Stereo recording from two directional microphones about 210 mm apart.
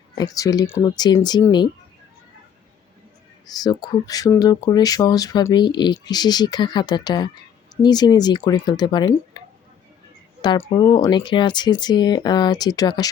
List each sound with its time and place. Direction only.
0.2 s speech: 15° left (ahead or behind)
3.4 s speech: 20° left (ahead or behind)
10.4 s speech: 20° left (ahead or behind)